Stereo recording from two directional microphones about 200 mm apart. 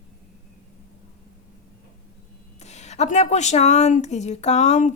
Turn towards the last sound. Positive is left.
turn(degrees=35)  # may be behind; listen again after turning